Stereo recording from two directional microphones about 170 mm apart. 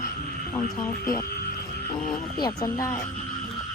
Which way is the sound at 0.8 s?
20° left (ahead or behind).